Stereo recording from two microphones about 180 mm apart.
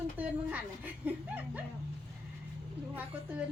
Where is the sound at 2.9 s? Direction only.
10° right (ahead or behind).